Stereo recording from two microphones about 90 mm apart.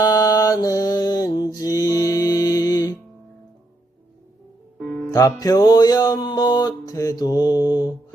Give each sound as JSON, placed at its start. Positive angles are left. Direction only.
{"t": 0.0, "sound": "mantra", "side_deg": 45}
{"t": 4.8, "sound": "music", "side_deg": 15}
{"t": 5.1, "sound": "mantra", "side_deg": 40}